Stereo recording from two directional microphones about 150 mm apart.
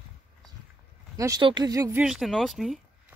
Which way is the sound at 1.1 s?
20° right (ahead or behind).